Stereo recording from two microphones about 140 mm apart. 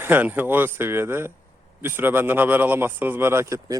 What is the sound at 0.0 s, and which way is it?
A man's voice, 15° right (ahead or behind).